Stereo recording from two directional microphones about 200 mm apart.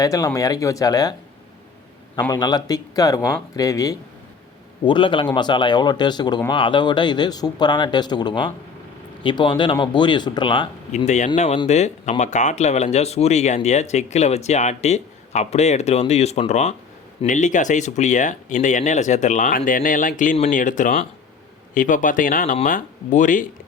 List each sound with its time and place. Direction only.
0.0 s speech: 15° left (ahead or behind)
2.3 s speech: 20° left (ahead or behind)
10.9 s speech: 35° left (ahead or behind)